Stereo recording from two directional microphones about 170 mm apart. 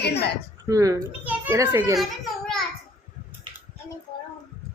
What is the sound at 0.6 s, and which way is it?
Speech, 20° right (ahead or behind).